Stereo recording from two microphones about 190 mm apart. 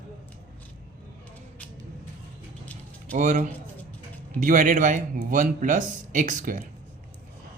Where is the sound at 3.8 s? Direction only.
10° left (ahead or behind).